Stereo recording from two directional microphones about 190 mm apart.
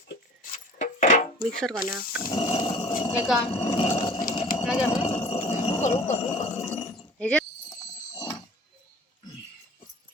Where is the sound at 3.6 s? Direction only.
25° left (ahead or behind).